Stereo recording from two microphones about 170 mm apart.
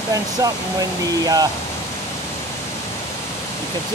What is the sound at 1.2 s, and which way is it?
Speech, 20° right (ahead or behind).